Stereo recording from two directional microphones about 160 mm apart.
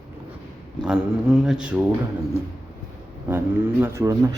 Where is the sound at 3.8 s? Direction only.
20° right (ahead or behind).